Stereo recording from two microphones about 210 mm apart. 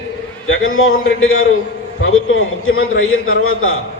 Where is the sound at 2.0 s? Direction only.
75° left (ahead or behind).